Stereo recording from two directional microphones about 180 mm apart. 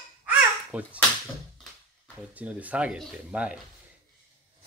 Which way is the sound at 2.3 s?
10° right (ahead or behind).